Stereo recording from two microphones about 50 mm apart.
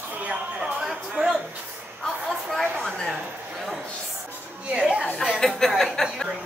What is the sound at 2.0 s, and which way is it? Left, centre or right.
Speech, centre.